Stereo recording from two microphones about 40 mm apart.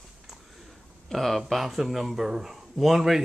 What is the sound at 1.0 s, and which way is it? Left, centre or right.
A man's voice, centre.